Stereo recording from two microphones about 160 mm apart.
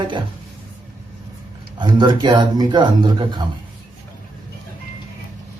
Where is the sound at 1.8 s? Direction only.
30° right (ahead or behind).